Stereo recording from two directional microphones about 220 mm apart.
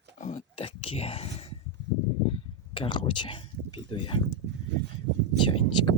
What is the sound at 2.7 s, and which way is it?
Speech, 25° left (ahead or behind).